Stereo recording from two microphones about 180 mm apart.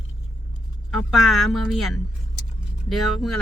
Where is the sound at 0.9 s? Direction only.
Centre (ahead or behind).